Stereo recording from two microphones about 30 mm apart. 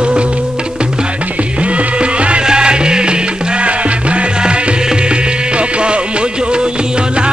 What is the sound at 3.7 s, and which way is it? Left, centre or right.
Music, right.